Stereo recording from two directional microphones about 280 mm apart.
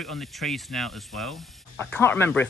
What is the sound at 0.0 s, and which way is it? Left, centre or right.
Speech, centre.